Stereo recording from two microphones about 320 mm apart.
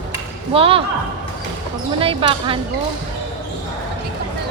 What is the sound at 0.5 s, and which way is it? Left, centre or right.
Speech, centre.